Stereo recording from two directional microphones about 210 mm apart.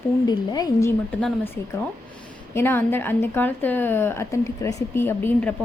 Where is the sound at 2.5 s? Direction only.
10° left (ahead or behind).